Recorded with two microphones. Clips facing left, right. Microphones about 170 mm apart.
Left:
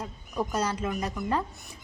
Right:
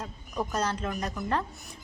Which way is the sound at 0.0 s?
10° left (ahead or behind).